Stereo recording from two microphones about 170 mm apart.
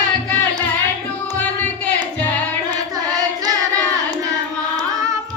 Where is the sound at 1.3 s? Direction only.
10° left (ahead or behind).